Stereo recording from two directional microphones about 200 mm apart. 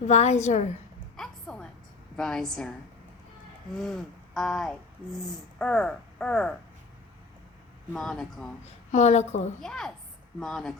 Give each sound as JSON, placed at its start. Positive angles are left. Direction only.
{"t": 0.1, "sound": "a woman's voice", "side_deg": 35}
{"t": 1.1, "sound": "a sound", "side_deg": 5}
{"t": 2.1, "sound": "speech", "side_deg": 5}
{"t": 3.8, "sound": "speech", "side_deg": 0}
{"t": 7.9, "sound": "speech", "side_deg": 5}
{"t": 8.9, "sound": "a woman's voice", "side_deg": 35}
{"t": 9.6, "sound": "speech", "side_deg": 5}